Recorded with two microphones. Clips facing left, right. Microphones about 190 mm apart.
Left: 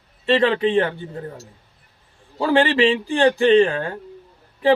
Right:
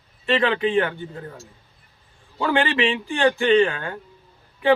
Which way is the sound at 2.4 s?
35° left (ahead or behind).